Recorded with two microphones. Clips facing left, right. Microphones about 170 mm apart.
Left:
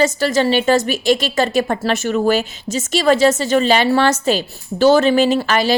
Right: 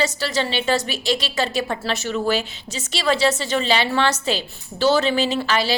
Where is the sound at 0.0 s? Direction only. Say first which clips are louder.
Left 7 dB; 50° left (ahead or behind).